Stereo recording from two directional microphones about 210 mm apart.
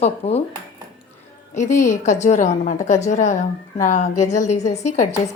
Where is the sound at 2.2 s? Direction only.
35° left (ahead or behind).